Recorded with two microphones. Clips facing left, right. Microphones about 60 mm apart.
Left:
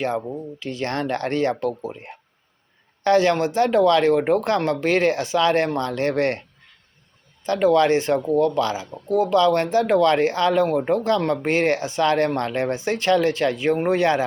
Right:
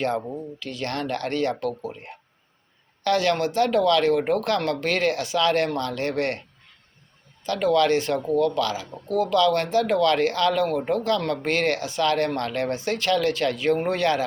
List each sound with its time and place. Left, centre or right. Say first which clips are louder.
0.2 s speech: left 2 dB; centre
0.6 s speech: left 4 dB; left
3.0 s speech: left 4 dB; left
7.4 s speech: left 3 dB; left